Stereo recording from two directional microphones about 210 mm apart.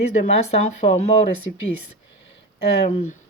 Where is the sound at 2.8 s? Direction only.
30° left (ahead or behind).